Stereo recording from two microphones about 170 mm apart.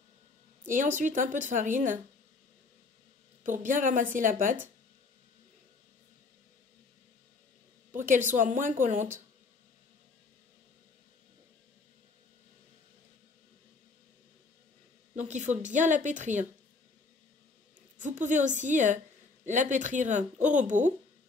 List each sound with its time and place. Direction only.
0.7 s speech: 50° right (ahead or behind)
3.4 s speech: 50° right (ahead or behind)
7.9 s speech: 50° right (ahead or behind)
15.1 s speech: 45° right (ahead or behind)
17.9 s speech: 45° right (ahead or behind)